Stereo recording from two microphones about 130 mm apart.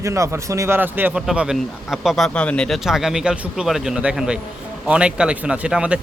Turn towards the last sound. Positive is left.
turn(degrees=-10)  # may be behind; listen again after turning